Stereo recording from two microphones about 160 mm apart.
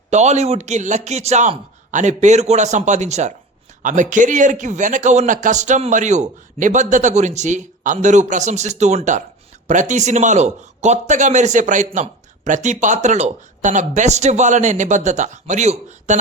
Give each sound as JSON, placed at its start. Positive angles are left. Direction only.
{"t": 0.1, "sound": "a man's voice", "side_deg": -45}